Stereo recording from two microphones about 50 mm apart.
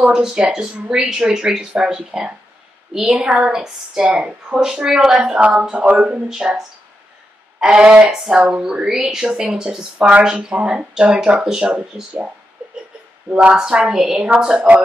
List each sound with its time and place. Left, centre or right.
0.1 s speech: centre
2.9 s a woman's voice: centre
3.2 s speech: centre
6.2 s speech: centre
7.6 s speech: centre
13.3 s speech: right